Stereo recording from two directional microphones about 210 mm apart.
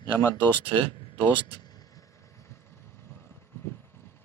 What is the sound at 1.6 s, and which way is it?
Vehicle, 20° left (ahead or behind).